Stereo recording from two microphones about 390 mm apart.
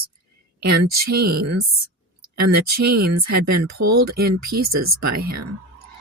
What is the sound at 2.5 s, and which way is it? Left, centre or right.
Speech, right.